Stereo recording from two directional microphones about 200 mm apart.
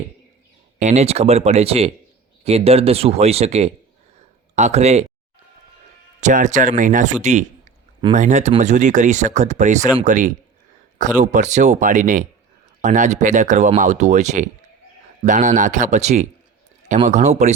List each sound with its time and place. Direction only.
0.8 s speech: 35° right (ahead or behind)
6.1 s speech: 35° right (ahead or behind)